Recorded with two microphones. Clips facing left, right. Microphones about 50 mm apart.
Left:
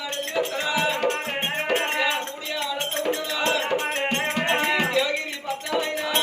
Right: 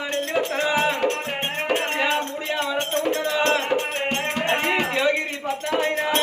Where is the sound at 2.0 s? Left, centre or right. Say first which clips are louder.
Right 2 dB; right.